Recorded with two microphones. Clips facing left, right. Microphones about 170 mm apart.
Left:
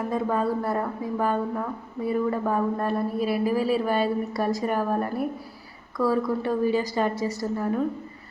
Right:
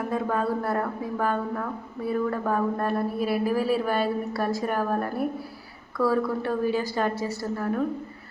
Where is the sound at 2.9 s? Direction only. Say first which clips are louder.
Even; 5° right (ahead or behind).